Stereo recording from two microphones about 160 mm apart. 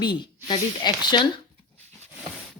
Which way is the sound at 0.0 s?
30° left (ahead or behind).